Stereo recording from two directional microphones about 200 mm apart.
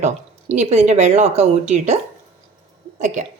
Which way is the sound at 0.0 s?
35° right (ahead or behind).